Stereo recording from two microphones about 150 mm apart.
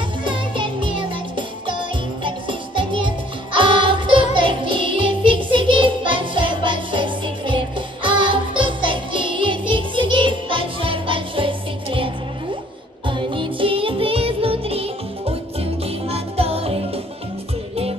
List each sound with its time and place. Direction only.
0.2 s music: 35° right (ahead or behind)
13.1 s music: 35° right (ahead or behind)